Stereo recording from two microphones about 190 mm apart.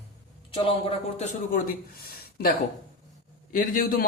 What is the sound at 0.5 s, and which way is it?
Speech, 30° left (ahead or behind).